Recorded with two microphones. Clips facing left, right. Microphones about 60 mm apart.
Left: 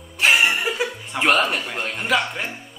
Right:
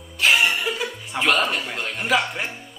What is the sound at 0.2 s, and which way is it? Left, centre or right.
Music, left.